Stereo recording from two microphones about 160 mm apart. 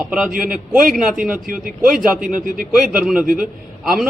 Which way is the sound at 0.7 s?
5° right (ahead or behind).